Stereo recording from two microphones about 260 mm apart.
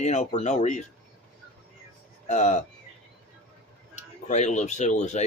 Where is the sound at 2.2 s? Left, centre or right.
Left.